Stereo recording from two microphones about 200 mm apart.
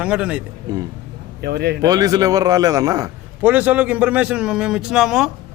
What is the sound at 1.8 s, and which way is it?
A man's voice, 20° right (ahead or behind).